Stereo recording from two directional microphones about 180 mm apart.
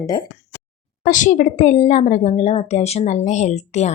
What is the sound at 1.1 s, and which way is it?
A woman's voice, 45° left (ahead or behind).